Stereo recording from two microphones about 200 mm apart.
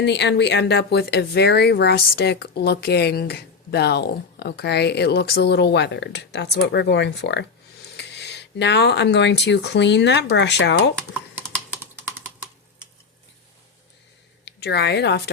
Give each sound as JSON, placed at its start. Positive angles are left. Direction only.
{"t": 0.0, "sound": "speech", "side_deg": 60}
{"t": 11.3, "sound": "typing", "side_deg": -10}
{"t": 14.4, "sound": "speech", "side_deg": 55}